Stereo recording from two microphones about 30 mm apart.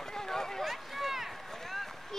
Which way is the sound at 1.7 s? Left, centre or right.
Centre.